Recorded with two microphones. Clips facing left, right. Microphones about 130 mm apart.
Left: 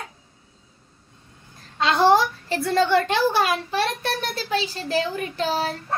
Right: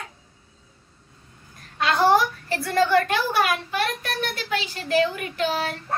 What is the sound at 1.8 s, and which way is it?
A woman's voice, 25° left (ahead or behind).